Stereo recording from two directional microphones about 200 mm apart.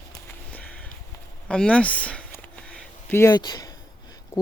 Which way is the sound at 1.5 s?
5° left (ahead or behind).